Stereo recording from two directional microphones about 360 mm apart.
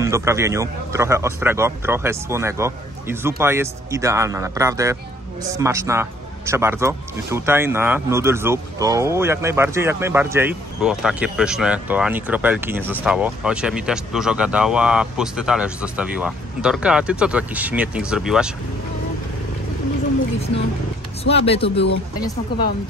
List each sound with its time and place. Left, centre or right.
0.0 s a man's voice: centre
21.2 s speech: centre